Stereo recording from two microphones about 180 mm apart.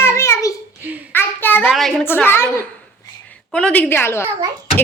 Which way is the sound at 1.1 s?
10° left (ahead or behind).